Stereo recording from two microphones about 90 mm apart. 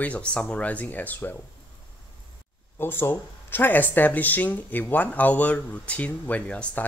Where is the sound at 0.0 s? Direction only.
15° left (ahead or behind).